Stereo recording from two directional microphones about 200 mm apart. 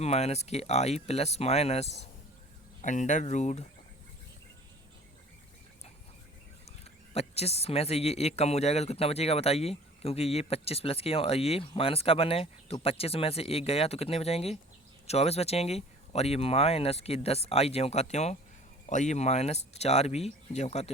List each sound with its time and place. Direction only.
0.0 s speech: 30° left (ahead or behind)
6.7 s speech: 30° left (ahead or behind)